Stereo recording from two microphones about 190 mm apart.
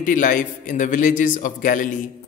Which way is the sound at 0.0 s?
45° left (ahead or behind).